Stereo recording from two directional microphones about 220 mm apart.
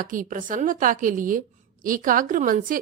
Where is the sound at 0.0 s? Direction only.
35° right (ahead or behind).